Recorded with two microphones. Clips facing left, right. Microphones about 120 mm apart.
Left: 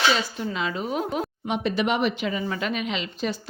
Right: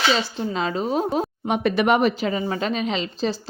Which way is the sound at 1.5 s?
55° right (ahead or behind).